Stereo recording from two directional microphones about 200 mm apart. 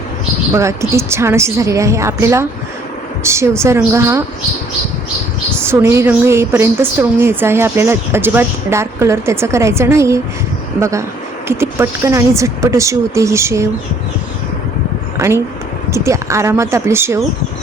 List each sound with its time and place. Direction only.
0.5 s a woman's voice: 15° right (ahead or behind)
5.6 s a woman's voice: 15° right (ahead or behind)
15.2 s a woman's voice: 15° right (ahead or behind)